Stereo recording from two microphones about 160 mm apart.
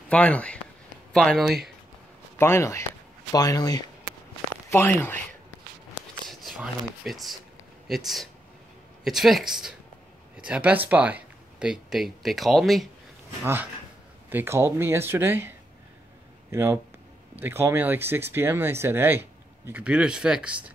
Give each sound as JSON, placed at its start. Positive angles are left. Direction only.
{"t": 0.1, "sound": "speech", "side_deg": 10}
{"t": 2.3, "sound": "speech", "side_deg": 15}
{"t": 4.6, "sound": "speech", "side_deg": 15}
{"t": 6.2, "sound": "a sound", "side_deg": 0}
{"t": 7.1, "sound": "speech", "side_deg": 0}
{"t": 13.4, "sound": "speech", "side_deg": -10}